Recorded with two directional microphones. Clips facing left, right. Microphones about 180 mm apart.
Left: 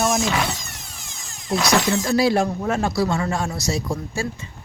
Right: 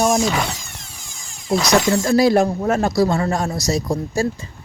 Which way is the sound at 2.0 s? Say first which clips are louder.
Right 5 dB; 45° right (ahead or behind).